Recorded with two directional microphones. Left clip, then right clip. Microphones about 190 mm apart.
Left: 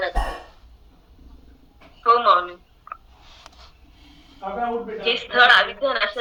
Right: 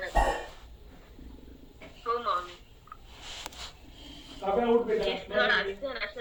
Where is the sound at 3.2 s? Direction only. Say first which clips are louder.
Right 5 dB; 60° right (ahead or behind).